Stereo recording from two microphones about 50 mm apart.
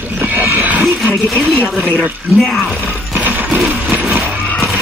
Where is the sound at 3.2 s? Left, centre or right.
Right.